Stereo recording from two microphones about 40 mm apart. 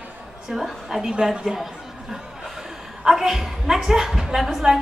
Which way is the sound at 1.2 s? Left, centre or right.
Centre.